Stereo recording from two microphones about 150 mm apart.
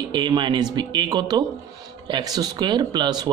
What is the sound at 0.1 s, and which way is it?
Speech, 30° right (ahead or behind).